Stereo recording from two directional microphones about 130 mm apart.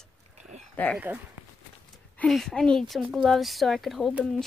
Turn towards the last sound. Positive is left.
turn(degrees=0)  # may be behind; listen again after turning